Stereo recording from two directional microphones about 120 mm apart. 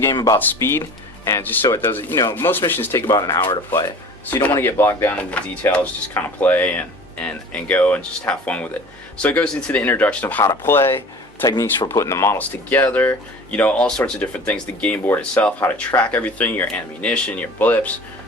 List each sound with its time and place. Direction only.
0.0 s speech: 30° left (ahead or behind)
3.1 s speech: 35° left (ahead or behind)
4.5 s speech: 20° left (ahead or behind)
12.4 s speech: 15° left (ahead or behind)